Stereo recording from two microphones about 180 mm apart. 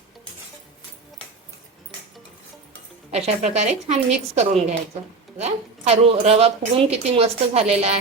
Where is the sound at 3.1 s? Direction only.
35° right (ahead or behind).